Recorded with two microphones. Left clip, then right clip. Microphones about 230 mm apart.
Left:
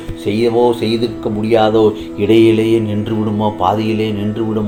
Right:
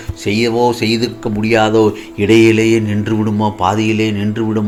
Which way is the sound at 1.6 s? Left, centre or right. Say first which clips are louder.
Even; right.